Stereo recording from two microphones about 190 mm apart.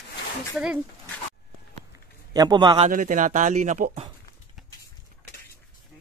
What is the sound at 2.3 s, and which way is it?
Speech, 20° right (ahead or behind).